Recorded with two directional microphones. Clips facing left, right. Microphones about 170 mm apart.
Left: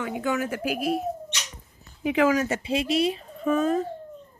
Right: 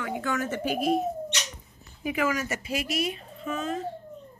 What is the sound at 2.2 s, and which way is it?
Speech, 30° left (ahead or behind).